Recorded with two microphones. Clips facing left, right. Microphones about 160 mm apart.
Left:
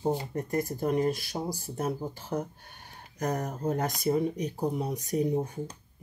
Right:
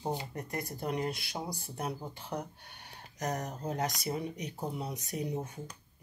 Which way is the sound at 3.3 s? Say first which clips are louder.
Left 7 dB; 45° left (ahead or behind).